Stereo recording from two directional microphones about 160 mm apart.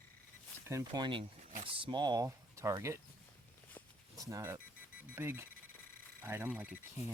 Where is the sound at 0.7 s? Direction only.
20° right (ahead or behind).